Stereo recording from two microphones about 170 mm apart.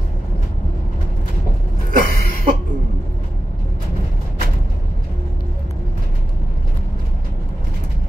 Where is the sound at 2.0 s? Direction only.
55° right (ahead or behind).